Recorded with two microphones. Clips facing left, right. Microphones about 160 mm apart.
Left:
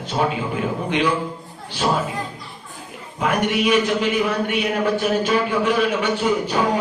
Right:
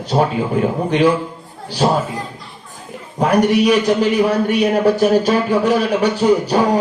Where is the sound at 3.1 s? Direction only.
40° right (ahead or behind).